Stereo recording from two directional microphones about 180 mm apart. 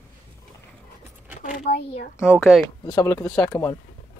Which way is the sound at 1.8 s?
65° left (ahead or behind).